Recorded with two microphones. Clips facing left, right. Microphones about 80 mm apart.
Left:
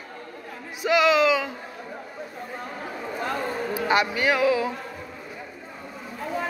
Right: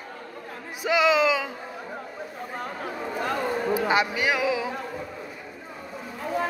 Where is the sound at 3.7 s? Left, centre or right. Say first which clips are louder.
Left 1 dB; right.